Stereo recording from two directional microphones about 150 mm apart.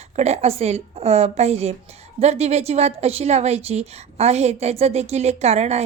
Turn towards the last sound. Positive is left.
turn(degrees=-45)  # may be behind; listen again after turning